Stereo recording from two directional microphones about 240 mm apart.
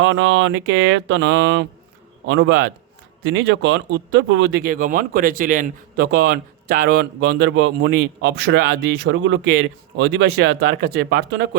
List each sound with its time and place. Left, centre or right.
0.0 s speech: right